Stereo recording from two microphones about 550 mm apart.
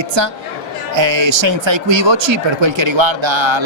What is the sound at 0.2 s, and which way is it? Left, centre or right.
Speech, right.